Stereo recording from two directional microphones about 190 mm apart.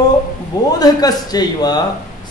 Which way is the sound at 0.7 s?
20° left (ahead or behind).